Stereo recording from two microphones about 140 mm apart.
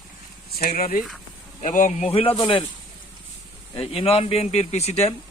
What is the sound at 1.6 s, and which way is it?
Speech, 60° left (ahead or behind).